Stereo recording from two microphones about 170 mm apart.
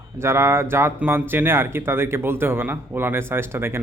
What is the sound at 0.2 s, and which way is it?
Speech, 15° right (ahead or behind).